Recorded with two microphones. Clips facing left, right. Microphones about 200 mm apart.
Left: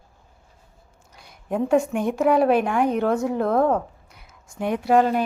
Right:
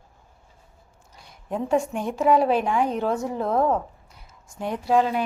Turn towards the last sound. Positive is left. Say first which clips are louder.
# left 3 dB
turn(degrees=50)  # may be behind; listen again after turning